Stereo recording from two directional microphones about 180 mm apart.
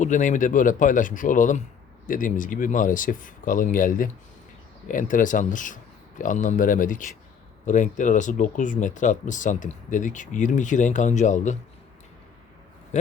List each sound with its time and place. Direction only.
0.0 s speech: 45° left (ahead or behind)
12.9 s speech: 40° left (ahead or behind)